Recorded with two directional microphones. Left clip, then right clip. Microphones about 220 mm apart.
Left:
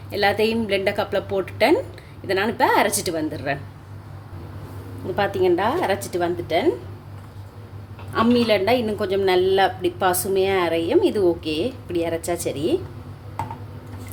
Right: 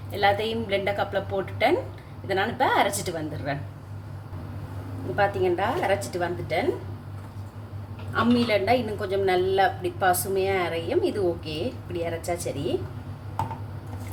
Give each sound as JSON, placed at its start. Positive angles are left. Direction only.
{"t": 0.1, "sound": "a woman's voice", "side_deg": 45}
{"t": 5.1, "sound": "a woman's voice", "side_deg": 35}
{"t": 8.1, "sound": "a woman's voice", "side_deg": 40}